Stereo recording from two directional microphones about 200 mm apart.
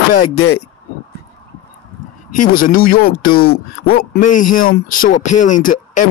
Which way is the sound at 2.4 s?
45° left (ahead or behind).